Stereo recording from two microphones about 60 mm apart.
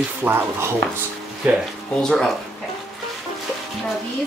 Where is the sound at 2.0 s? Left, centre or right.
Centre.